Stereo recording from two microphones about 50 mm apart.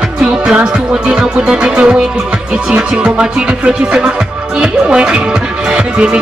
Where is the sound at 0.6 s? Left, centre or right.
Right.